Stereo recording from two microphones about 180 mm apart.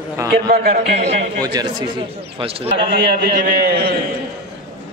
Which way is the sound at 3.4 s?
60° right (ahead or behind).